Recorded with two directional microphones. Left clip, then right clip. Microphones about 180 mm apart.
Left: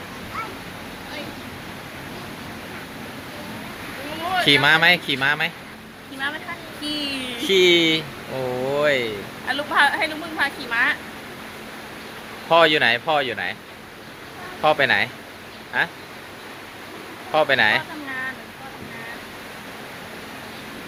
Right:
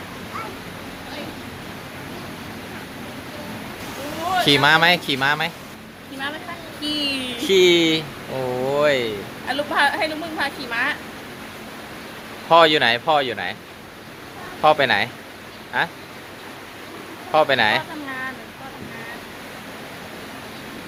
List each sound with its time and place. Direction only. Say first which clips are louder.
4.4 s speech: right 1 dB; centre (ahead or behind)
6.8 s a sound: right 3 dB; 20° right (ahead or behind)
7.4 s speech: right 1 dB; centre (ahead or behind)
9.5 s a woman's voice: left 1 dB; 25° right (ahead or behind)
12.5 s speech: right 2 dB; centre (ahead or behind)
14.6 s speech: right 1 dB; 5° right (ahead or behind)
17.3 s speech: right 1 dB; centre (ahead or behind)